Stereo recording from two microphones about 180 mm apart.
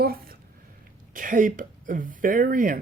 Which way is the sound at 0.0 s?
55° right (ahead or behind).